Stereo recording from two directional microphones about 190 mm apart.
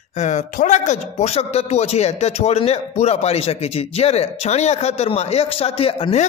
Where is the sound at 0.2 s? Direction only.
40° left (ahead or behind).